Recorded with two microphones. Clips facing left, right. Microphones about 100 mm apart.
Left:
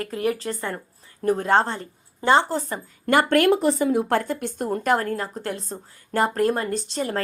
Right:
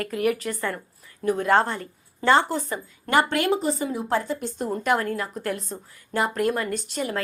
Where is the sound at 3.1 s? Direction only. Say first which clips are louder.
Left 4 dB; 50° left (ahead or behind).